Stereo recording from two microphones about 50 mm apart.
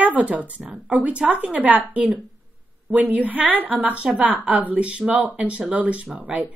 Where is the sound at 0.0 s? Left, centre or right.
Right.